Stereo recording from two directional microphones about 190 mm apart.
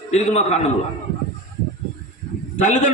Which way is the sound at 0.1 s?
35° left (ahead or behind).